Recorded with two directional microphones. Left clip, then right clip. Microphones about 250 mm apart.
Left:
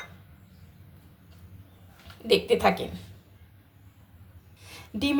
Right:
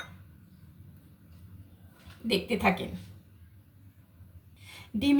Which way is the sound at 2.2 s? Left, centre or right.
Left.